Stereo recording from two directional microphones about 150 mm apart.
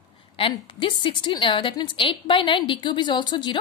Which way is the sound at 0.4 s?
35° left (ahead or behind).